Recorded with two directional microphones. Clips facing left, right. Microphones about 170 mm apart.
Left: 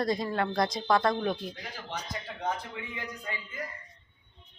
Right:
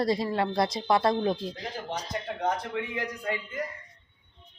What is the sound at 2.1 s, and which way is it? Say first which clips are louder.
A man's voice: right 5 dB; 65° right (ahead or behind).